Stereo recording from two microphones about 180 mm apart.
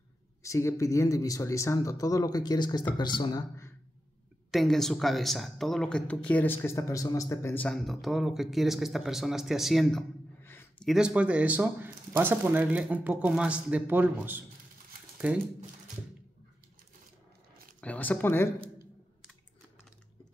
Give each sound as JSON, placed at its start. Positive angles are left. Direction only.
{"t": 0.4, "sound": "speech", "side_deg": 15}
{"t": 4.5, "sound": "speech", "side_deg": 0}
{"t": 10.4, "sound": "a sound", "side_deg": 10}
{"t": 10.9, "sound": "speech", "side_deg": -5}
{"t": 17.7, "sound": "speech", "side_deg": 10}